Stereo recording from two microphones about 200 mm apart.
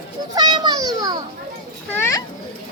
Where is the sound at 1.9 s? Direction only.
10° left (ahead or behind).